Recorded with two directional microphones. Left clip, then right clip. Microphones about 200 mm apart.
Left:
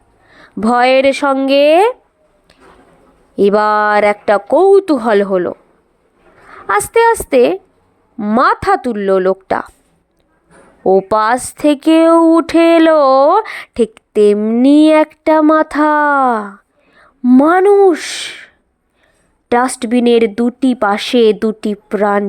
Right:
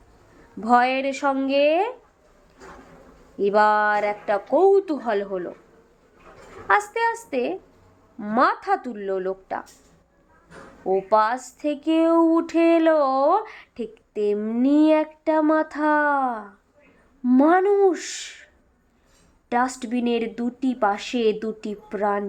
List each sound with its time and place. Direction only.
0.6 s speech: 45° left (ahead or behind)
3.3 s speech: 45° left (ahead or behind)
6.7 s speech: 45° left (ahead or behind)
10.8 s speech: 45° left (ahead or behind)
14.3 s speech: 35° left (ahead or behind)